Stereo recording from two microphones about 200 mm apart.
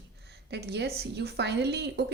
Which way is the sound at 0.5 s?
55° right (ahead or behind).